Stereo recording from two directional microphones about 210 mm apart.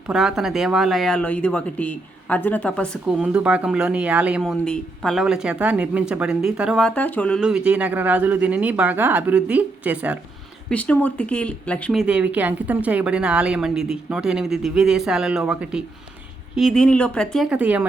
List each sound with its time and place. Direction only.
0.1 s speech: centre (ahead or behind)
10.7 s speech: 5° left (ahead or behind)